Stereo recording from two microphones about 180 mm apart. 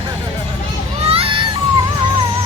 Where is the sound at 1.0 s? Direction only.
30° right (ahead or behind).